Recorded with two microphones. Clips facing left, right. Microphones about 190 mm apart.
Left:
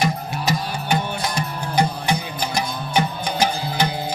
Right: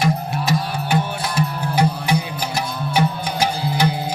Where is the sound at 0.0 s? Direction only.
Centre (ahead or behind).